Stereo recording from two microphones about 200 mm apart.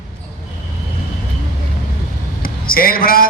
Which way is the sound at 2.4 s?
45° left (ahead or behind).